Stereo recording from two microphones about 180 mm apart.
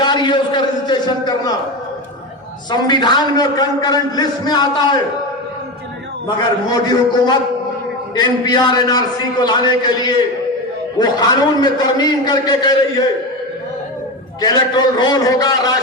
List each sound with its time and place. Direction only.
0.0 s a sound: 25° left (ahead or behind)
2.6 s a man's voice: 25° left (ahead or behind)
6.2 s a man's voice: 25° left (ahead or behind)
14.4 s a man's voice: 20° left (ahead or behind)